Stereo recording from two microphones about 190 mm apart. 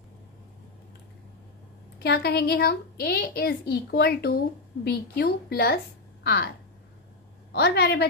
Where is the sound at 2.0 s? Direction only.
60° left (ahead or behind).